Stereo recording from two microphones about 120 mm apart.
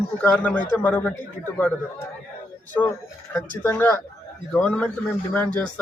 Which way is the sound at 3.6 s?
15° left (ahead or behind).